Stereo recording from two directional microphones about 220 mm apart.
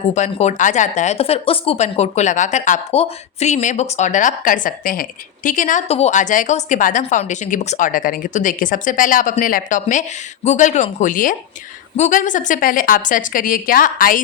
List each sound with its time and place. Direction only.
0.1 s speech: 30° left (ahead or behind)